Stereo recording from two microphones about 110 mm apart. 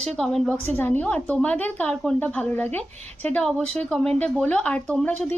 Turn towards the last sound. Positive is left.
turn(degrees=15)  # may be behind; listen again after turning